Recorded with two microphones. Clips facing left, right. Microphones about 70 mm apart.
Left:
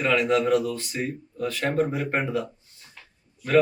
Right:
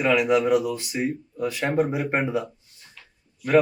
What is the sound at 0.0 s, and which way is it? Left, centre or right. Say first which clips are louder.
Speech: right 2 dB; centre.